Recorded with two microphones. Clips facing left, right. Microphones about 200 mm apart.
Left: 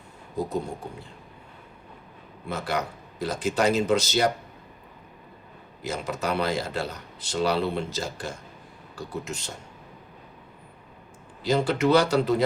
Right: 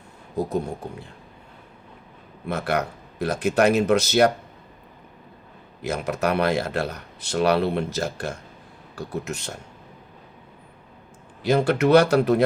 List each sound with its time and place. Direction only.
2.5 s speech: 65° right (ahead or behind)
5.8 s speech: 65° right (ahead or behind)
11.4 s speech: 60° right (ahead or behind)